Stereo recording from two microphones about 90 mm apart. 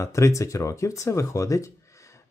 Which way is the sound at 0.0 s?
35° left (ahead or behind).